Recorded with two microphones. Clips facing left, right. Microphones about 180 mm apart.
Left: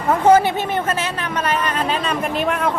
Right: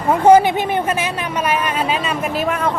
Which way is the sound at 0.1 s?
10° right (ahead or behind).